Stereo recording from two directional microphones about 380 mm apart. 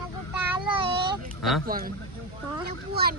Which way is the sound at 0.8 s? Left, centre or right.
Centre.